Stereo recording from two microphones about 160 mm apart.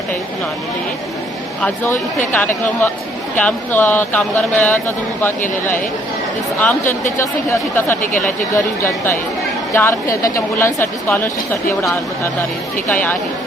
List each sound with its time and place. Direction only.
1.6 s speech: 10° left (ahead or behind)
6.6 s speech: 10° left (ahead or behind)
12.9 s speech: 10° left (ahead or behind)